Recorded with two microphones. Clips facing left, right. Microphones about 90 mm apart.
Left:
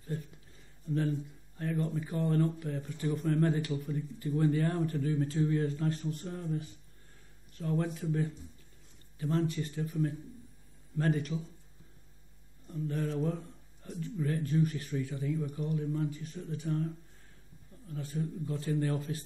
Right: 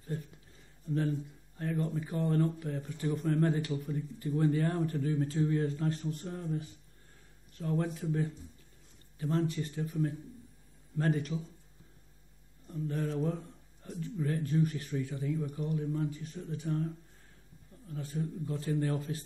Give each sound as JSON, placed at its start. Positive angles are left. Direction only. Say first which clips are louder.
{"t": 0.8, "sound": "speech", "louder": "even", "side_deg": -30}
{"t": 12.6, "sound": "speech", "louder": "even", "side_deg": -30}